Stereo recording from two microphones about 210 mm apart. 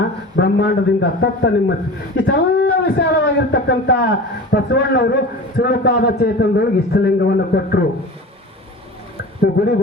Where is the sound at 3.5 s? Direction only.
50° left (ahead or behind).